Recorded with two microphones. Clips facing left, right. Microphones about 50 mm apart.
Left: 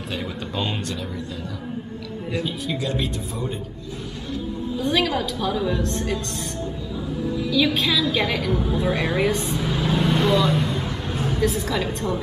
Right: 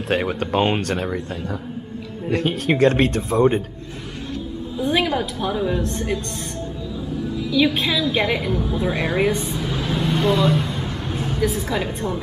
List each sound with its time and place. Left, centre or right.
0.1 s speech: right
2.3 s speech: right
4.7 s a woman's voice: right
7.5 s a woman's voice: centre
8.5 s speech: centre
9.0 s speech: centre
9.7 s vehicle: left
10.0 s vehicle: centre
11.4 s speech: centre